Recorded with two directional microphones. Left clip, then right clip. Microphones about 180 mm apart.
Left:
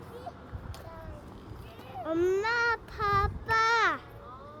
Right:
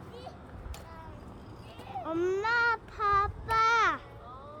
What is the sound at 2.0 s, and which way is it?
Child singing, 15° left (ahead or behind).